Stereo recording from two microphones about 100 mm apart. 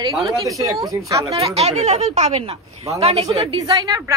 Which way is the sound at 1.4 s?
90° right.